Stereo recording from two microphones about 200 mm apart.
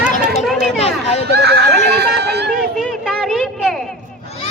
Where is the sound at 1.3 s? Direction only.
55° right (ahead or behind).